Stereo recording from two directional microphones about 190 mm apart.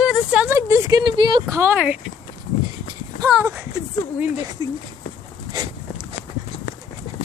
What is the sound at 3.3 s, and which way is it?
Speech, 10° right (ahead or behind).